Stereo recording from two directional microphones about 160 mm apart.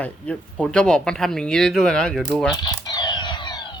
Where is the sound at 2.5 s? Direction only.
25° left (ahead or behind).